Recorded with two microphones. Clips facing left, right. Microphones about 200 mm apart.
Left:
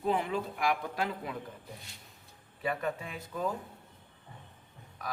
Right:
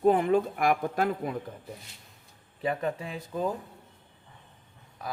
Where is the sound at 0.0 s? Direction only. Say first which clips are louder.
Right 9 dB; 50° right (ahead or behind).